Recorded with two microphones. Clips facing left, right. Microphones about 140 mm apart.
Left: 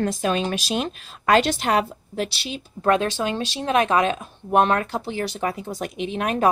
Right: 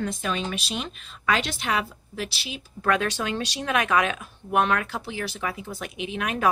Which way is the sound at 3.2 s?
30° left (ahead or behind).